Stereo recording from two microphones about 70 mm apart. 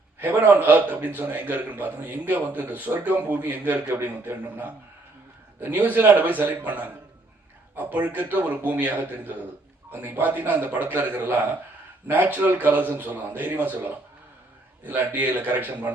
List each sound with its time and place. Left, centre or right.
0.2 s a man's voice: right
14.8 s a man's voice: right